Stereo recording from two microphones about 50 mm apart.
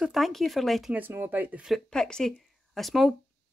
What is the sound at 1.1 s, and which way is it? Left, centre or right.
Speech, right.